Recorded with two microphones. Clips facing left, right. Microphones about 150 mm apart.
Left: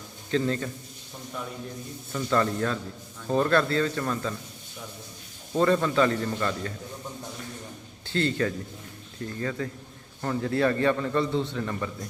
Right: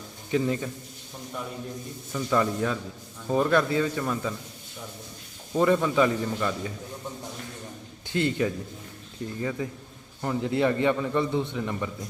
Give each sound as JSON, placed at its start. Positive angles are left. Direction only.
{"t": 0.3, "sound": "a man's voice", "side_deg": -15}
{"t": 2.1, "sound": "a man's voice", "side_deg": -10}
{"t": 5.5, "sound": "a man's voice", "side_deg": -10}
{"t": 8.0, "sound": "a man's voice", "side_deg": -15}